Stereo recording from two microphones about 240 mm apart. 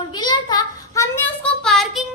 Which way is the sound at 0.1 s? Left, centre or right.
Centre.